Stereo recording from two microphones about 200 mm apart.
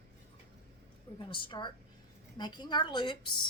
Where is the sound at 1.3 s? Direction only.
25° left (ahead or behind).